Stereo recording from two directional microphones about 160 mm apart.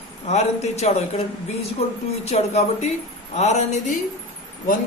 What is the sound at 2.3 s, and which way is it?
A woman's voice, 40° left (ahead or behind).